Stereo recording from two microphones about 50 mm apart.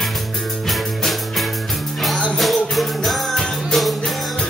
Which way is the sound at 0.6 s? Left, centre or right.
Centre.